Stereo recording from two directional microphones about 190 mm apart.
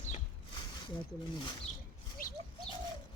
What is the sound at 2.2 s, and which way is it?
Bird, 50° left (ahead or behind).